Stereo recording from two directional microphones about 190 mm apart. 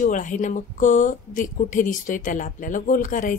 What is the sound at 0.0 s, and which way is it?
A woman's voice, 40° left (ahead or behind).